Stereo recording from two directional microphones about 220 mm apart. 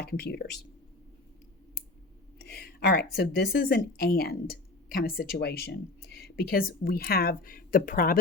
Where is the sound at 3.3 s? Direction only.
45° left (ahead or behind).